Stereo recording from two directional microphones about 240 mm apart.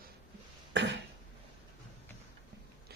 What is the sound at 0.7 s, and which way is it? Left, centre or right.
Cough, right.